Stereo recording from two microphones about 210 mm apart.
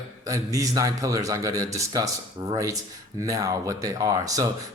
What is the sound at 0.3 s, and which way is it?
Speech, 15° right (ahead or behind).